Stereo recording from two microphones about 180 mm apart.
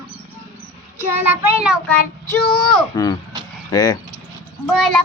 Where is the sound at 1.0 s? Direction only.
10° right (ahead or behind).